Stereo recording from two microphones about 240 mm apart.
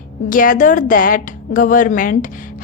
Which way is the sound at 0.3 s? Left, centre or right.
Left.